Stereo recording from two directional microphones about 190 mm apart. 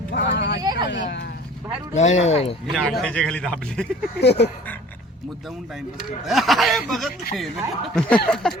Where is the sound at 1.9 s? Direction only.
35° left (ahead or behind).